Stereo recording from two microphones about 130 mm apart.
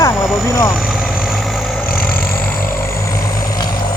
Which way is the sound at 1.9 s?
90° left.